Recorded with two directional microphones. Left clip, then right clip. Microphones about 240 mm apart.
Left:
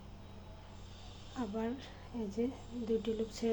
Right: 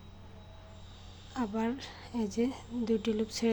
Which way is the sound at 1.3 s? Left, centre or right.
Right.